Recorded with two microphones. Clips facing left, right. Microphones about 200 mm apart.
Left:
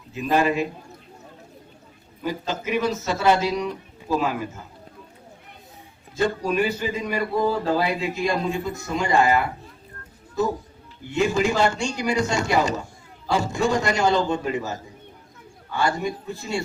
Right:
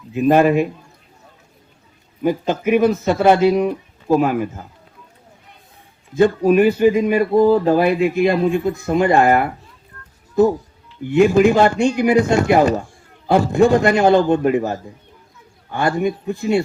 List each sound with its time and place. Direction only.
0.1 s speech: 55° right (ahead or behind)
2.5 s speech: 55° right (ahead or behind)
6.1 s speech: 55° right (ahead or behind)
11.0 s speech: 55° right (ahead or behind)